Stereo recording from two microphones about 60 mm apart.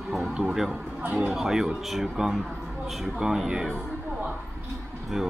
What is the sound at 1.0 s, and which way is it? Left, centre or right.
Speech, right.